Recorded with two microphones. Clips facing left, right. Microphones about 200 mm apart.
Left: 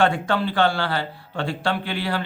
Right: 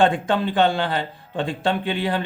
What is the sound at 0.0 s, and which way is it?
A man's voice, 20° right (ahead or behind).